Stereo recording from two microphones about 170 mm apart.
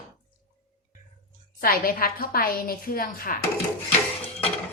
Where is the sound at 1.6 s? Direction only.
60° left (ahead or behind).